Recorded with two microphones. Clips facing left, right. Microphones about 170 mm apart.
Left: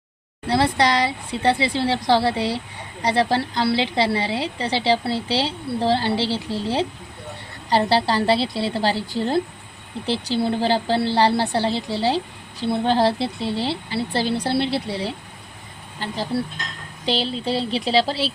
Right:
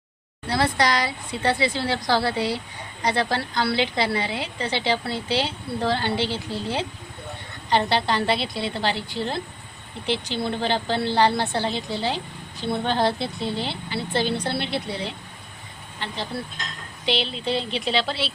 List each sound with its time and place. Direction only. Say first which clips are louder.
0.4 s a woman's voice: left 3 dB; 30° left (ahead or behind)